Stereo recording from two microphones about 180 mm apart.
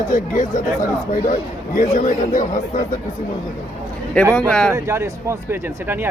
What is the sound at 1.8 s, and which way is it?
Speech, 45° left (ahead or behind).